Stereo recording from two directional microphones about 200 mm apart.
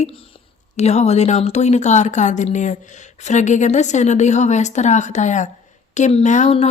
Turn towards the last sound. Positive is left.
turn(degrees=35)  # may be behind; listen again after turning